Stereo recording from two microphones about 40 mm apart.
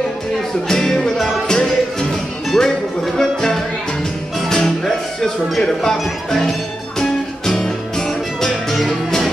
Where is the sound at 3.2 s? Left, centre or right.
Centre.